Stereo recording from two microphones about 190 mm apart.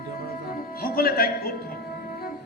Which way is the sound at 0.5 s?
50° left (ahead or behind).